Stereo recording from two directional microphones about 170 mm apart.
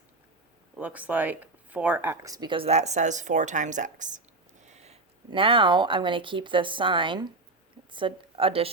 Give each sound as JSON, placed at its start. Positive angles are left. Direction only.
{"t": 0.8, "sound": "speech", "side_deg": -10}